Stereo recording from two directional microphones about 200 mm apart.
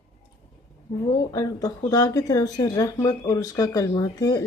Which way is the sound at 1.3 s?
15° left (ahead or behind).